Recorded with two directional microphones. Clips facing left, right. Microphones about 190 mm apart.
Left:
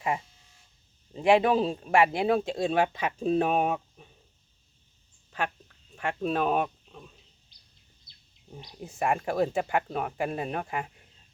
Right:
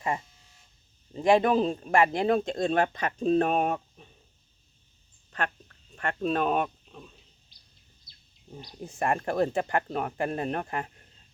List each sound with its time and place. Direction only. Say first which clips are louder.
1.1 s speech: even; 10° left (ahead or behind)
6.0 s speech: right 1 dB; 5° left (ahead or behind)
8.5 s speech: right 1 dB; 5° left (ahead or behind)